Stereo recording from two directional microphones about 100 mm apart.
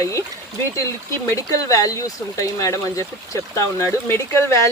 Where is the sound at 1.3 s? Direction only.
35° left (ahead or behind).